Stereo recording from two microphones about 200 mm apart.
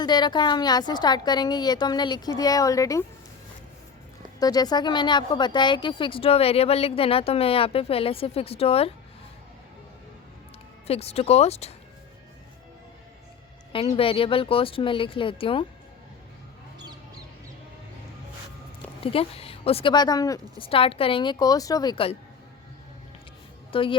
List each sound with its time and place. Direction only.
0.0 s speech: 20° left (ahead or behind)
4.4 s speech: 20° left (ahead or behind)
10.8 s speech: 30° left (ahead or behind)
13.7 s speech: 30° left (ahead or behind)
19.0 s speech: 30° left (ahead or behind)
23.7 s speech: 25° left (ahead or behind)